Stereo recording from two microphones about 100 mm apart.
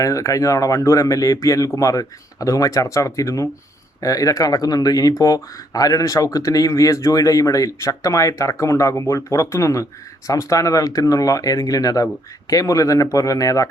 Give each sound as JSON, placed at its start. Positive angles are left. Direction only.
{"t": 0.0, "sound": "speech", "side_deg": 35}